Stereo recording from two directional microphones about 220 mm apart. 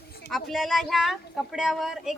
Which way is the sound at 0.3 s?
Centre (ahead or behind).